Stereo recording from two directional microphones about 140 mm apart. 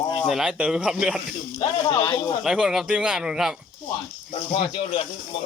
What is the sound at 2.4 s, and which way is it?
Speech, 5° right (ahead or behind).